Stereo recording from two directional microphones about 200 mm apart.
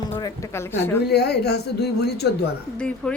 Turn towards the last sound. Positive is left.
turn(degrees=5)  # may be behind; listen again after turning